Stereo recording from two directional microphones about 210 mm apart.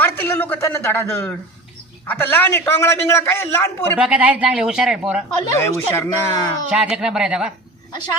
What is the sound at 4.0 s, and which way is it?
A woman's voice, 5° right (ahead or behind).